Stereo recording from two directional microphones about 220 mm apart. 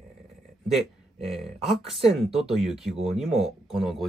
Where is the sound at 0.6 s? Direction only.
Centre (ahead or behind).